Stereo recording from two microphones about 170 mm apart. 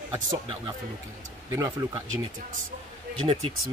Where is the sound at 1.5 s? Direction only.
20° right (ahead or behind).